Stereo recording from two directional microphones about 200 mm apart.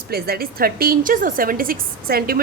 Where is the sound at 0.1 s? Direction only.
50° right (ahead or behind).